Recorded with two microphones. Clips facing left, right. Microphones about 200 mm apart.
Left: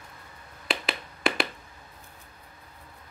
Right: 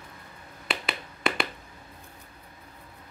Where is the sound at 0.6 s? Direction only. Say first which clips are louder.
Left 2 dB; centre (ahead or behind).